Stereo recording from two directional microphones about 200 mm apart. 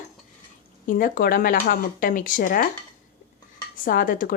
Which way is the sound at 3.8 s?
45° left (ahead or behind).